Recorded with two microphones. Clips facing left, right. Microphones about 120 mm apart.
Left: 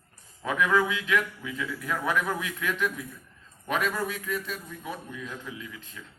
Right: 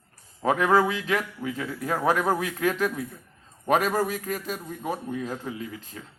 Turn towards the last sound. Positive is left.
turn(degrees=-40)  # may be behind; listen again after turning